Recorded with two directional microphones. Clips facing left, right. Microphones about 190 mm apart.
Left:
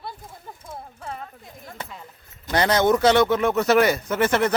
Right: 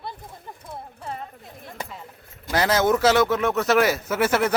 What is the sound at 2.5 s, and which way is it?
Speech, 5° right (ahead or behind).